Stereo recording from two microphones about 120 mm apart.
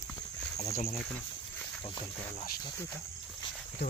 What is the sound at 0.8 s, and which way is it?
Speech, 60° left (ahead or behind).